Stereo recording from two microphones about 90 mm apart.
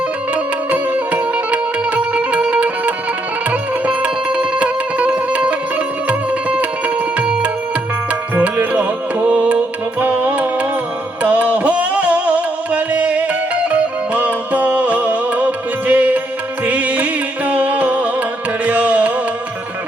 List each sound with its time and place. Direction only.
0.3 s music: 15° right (ahead or behind)